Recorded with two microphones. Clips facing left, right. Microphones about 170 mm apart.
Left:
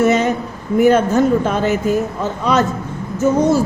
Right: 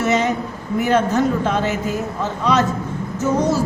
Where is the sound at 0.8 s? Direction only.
50° left (ahead or behind).